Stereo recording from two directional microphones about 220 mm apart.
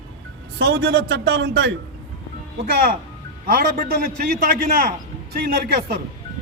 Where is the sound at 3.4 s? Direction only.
40° right (ahead or behind).